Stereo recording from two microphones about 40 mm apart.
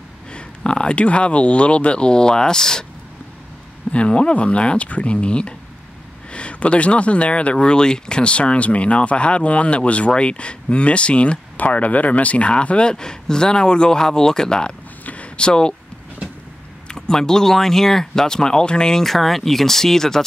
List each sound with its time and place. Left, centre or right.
0.3 s speech: left
3.9 s speech: left
11.5 s speech: left; by 14.7 s centre
15.0 s a sound: left
16.8 s speech: centre
19.0 s speech: centre